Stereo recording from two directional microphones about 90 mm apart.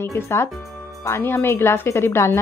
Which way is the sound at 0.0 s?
30° left (ahead or behind).